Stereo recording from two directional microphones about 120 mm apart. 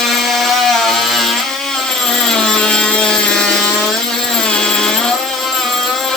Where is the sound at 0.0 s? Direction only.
Centre (ahead or behind).